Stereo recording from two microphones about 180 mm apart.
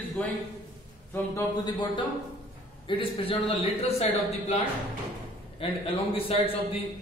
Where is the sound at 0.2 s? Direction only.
5° left (ahead or behind).